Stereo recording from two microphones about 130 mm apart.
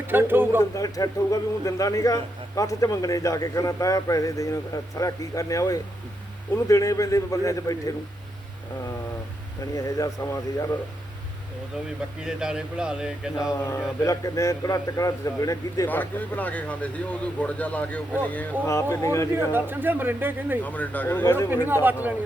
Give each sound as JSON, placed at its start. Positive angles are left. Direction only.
{"t": 0.1, "sound": "speech", "side_deg": -15}
{"t": 0.6, "sound": "a man's voice", "side_deg": 25}
{"t": 9.7, "sound": "a man's voice", "side_deg": 25}
{"t": 12.2, "sound": "speech", "side_deg": -5}
{"t": 13.6, "sound": "a man's voice", "side_deg": 20}
{"t": 15.9, "sound": "a man's voice", "side_deg": 15}
{"t": 19.5, "sound": "speech", "side_deg": -15}
{"t": 20.7, "sound": "speech", "side_deg": 10}
{"t": 21.5, "sound": "speech", "side_deg": -15}